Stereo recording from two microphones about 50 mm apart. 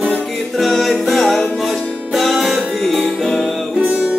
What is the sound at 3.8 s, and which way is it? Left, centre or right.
Music, right.